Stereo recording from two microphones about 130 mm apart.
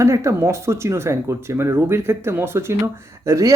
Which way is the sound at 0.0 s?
25° right (ahead or behind).